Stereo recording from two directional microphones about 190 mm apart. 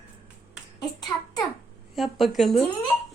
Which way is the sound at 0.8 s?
20° left (ahead or behind).